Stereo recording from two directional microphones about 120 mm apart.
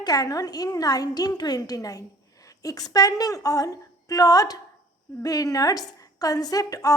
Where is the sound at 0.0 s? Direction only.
30° left (ahead or behind).